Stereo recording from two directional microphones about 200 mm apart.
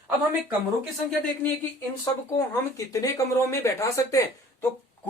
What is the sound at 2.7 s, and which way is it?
Speech, 15° left (ahead or behind).